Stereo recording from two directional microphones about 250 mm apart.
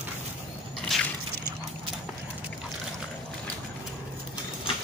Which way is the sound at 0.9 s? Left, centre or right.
Centre.